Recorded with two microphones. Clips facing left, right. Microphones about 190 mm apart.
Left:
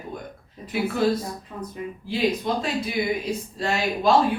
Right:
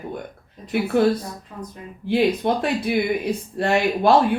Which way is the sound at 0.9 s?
65° right (ahead or behind).